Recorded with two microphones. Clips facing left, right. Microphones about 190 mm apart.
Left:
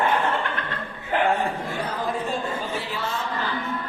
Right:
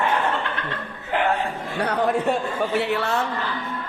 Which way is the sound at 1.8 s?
70° right (ahead or behind).